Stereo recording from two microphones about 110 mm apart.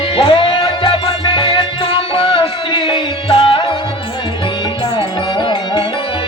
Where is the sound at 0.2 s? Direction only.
50° left (ahead or behind).